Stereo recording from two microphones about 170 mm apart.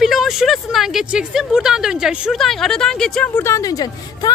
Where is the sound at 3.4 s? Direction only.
20° left (ahead or behind).